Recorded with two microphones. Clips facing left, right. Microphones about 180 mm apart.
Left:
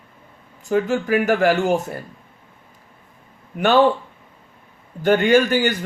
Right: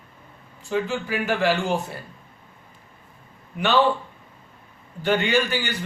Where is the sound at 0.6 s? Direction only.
45° left (ahead or behind).